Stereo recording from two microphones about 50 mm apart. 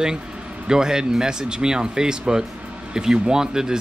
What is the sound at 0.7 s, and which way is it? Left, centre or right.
Speech, centre.